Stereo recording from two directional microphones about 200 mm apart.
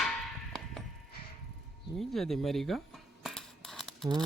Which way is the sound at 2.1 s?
Centre (ahead or behind).